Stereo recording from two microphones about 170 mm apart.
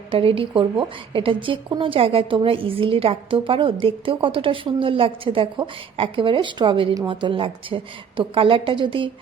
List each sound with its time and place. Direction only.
0.1 s a woman's voice: 35° right (ahead or behind)